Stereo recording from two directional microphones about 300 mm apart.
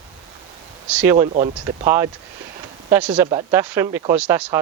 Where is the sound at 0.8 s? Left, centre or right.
Centre.